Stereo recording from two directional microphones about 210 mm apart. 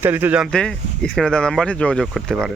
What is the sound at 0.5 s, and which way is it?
Speech, 5° left (ahead or behind).